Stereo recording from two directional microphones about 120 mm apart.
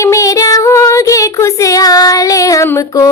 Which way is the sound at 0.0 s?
25° left (ahead or behind).